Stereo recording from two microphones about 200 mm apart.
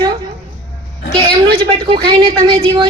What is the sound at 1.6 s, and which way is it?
A woman's voice, 25° right (ahead or behind).